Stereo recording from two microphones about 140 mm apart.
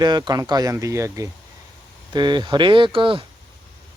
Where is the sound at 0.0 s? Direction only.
30° right (ahead or behind).